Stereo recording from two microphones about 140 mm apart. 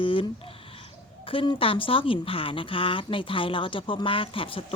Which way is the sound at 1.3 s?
40° left (ahead or behind).